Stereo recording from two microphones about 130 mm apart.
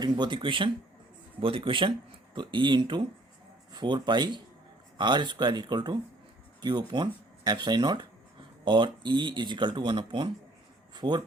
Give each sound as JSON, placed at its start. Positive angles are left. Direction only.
{"t": 0.0, "sound": "speech", "side_deg": -35}